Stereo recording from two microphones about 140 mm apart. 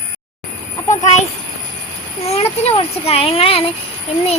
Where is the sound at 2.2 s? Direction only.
50° left (ahead or behind).